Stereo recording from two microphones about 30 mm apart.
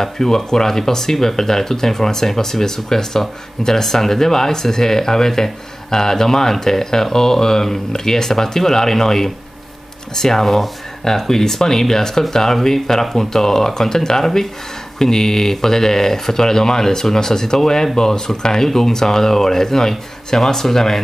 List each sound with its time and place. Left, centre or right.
0.0 s speech: centre